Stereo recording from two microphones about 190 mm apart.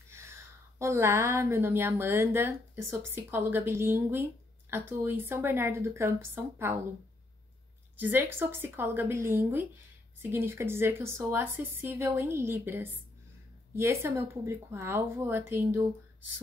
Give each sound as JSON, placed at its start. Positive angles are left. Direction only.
{"t": 0.1, "sound": "a woman's voice", "side_deg": -15}
{"t": 8.0, "sound": "a woman's voice", "side_deg": -10}